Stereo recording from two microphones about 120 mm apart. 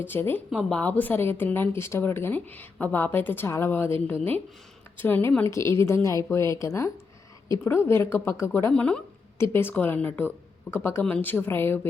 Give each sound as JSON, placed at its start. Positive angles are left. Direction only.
{"t": 0.0, "sound": "speech", "side_deg": 20}
{"t": 8.7, "sound": "speech", "side_deg": 10}
{"t": 9.4, "sound": "speech", "side_deg": 20}